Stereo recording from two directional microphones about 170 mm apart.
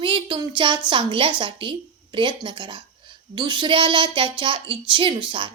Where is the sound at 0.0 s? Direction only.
30° right (ahead or behind).